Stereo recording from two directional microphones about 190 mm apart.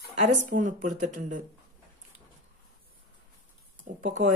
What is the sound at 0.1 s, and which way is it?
Speech, 40° right (ahead or behind).